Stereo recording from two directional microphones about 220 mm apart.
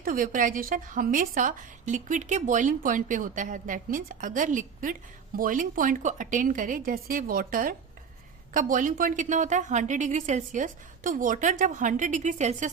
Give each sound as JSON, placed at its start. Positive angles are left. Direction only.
{"t": 0.0, "sound": "a woman's voice", "side_deg": -40}